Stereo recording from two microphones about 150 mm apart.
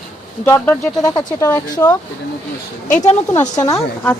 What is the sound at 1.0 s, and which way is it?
Speech, 25° left (ahead or behind).